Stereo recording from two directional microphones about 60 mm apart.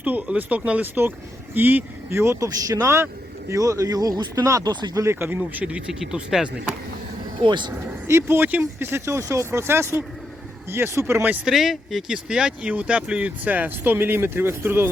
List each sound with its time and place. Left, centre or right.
0.0 s speech: right
2.0 s speech: right
3.5 s speech: right
4.4 s speech: right
5.2 s speech: right
5.9 s speech: centre
7.7 s speech: right
8.4 s speech: right
8.8 s speech: right
11.4 s speech: centre; by 14.8 s right